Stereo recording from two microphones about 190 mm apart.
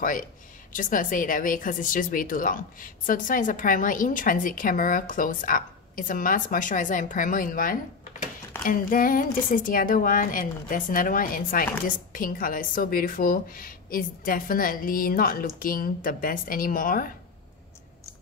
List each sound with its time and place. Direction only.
0.0 s a woman's voice: 45° left (ahead or behind)